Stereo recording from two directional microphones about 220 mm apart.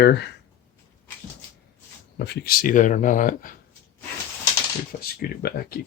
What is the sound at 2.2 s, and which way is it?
Speech, 45° left (ahead or behind).